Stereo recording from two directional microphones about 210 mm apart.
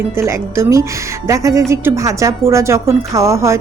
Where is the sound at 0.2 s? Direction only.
10° right (ahead or behind).